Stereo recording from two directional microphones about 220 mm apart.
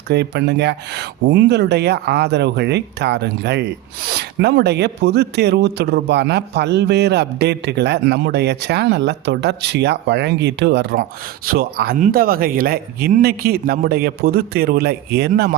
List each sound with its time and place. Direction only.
0.1 s speech: 50° right (ahead or behind)